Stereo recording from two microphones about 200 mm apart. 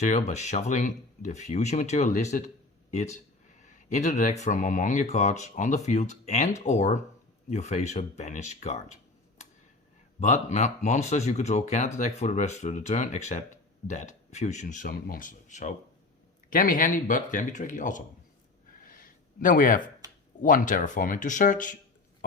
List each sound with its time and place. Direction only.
0.0 s speech: 35° left (ahead or behind)
3.6 s speech: 40° left (ahead or behind)
10.2 s speech: 35° left (ahead or behind)
18.7 s a sound: 45° left (ahead or behind)
20.4 s speech: 45° left (ahead or behind)